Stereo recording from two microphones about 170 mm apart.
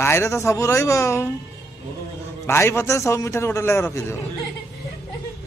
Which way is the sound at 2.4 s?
15° left (ahead or behind).